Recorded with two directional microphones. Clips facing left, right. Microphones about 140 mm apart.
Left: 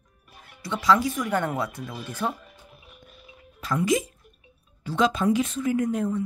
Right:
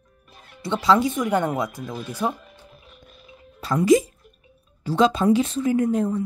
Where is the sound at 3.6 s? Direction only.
35° right (ahead or behind).